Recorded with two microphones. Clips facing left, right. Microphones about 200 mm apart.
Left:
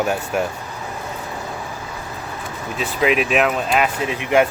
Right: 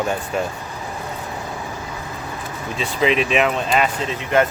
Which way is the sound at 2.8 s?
5° left (ahead or behind).